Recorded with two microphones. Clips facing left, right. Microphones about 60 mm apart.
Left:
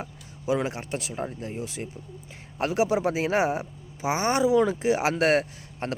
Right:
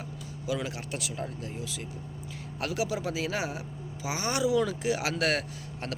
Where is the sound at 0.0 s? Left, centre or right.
Left.